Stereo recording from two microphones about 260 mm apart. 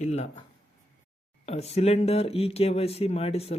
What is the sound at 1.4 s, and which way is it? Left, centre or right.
Speech, left.